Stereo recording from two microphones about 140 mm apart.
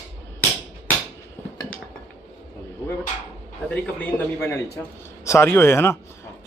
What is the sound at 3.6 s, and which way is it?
A man's voice, 10° left (ahead or behind).